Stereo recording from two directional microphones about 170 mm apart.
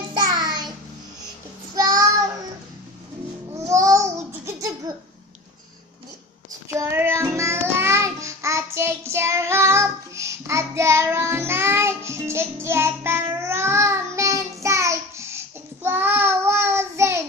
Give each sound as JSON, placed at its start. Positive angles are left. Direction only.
{"t": 0.1, "sound": "child singing", "side_deg": -25}
{"t": 1.8, "sound": "child singing", "side_deg": -20}
{"t": 3.5, "sound": "babbling", "side_deg": -20}
{"t": 6.7, "sound": "child singing", "side_deg": -15}